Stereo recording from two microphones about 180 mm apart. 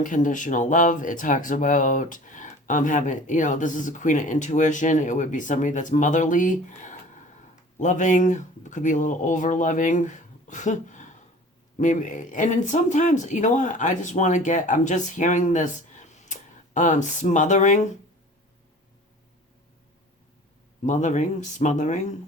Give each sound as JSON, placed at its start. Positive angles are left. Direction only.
{"t": 0.0, "sound": "speech", "side_deg": 45}
{"t": 20.8, "sound": "speech", "side_deg": 40}